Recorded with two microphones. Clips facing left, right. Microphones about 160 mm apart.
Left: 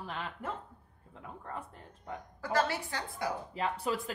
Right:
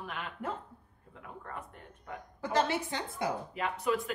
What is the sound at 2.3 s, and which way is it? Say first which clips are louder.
Speech: right 1 dB; 20° right (ahead or behind).